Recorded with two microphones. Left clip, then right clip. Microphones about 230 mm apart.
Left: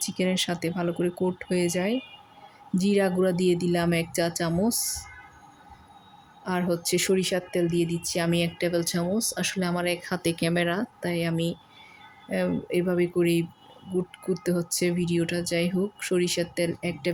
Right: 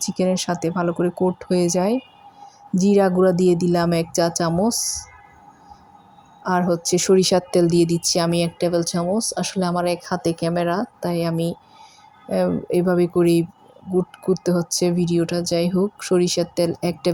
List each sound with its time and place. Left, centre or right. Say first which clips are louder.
0.0 s a woman's voice: right 5 dB; centre
6.4 s a woman's voice: right 7 dB; centre